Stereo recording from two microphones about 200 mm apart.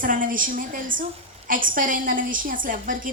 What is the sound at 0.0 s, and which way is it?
A woman's voice, 45° right (ahead or behind).